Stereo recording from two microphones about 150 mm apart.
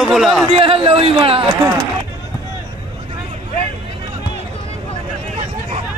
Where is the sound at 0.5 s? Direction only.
40° right (ahead or behind).